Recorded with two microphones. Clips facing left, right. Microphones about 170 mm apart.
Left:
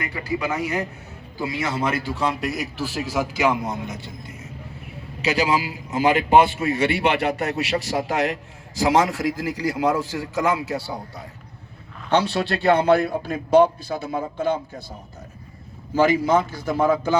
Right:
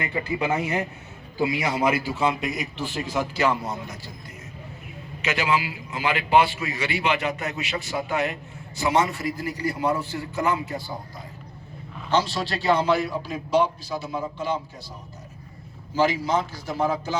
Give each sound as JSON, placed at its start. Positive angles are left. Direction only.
{"t": 0.0, "sound": "a man's voice", "side_deg": -25}
{"t": 5.2, "sound": "a man's voice", "side_deg": 35}
{"t": 12.1, "sound": "a man's voice", "side_deg": 60}
{"t": 16.0, "sound": "a man's voice", "side_deg": 55}